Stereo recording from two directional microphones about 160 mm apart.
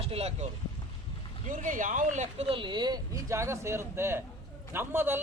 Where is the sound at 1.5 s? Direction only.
55° right (ahead or behind).